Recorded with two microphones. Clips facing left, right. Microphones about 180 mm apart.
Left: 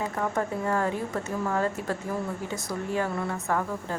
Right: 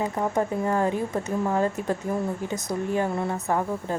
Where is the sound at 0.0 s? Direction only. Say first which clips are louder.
Right 3 dB; 20° right (ahead or behind).